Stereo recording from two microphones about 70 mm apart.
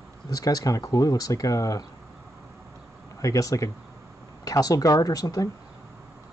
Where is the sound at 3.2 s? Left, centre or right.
Left.